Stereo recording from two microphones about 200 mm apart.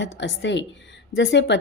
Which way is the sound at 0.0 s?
65° left (ahead or behind).